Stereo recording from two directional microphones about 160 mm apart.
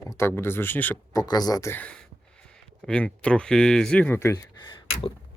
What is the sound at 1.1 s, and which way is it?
Speech, 25° left (ahead or behind).